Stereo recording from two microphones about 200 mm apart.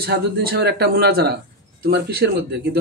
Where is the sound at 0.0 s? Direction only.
50° right (ahead or behind).